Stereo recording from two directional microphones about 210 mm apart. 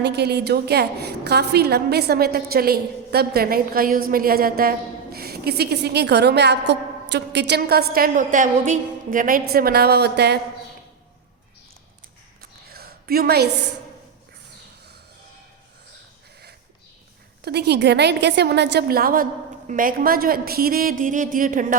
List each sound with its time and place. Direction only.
0.0 s a woman's voice: 55° right (ahead or behind)
12.4 s a sound: 45° right (ahead or behind)
17.4 s a woman's voice: 50° right (ahead or behind)